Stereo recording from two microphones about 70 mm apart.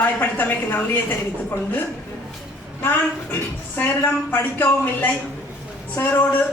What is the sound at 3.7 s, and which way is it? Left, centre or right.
A woman's voice, left.